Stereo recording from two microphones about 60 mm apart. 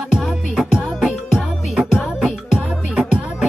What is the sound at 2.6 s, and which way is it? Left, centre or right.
Music, centre.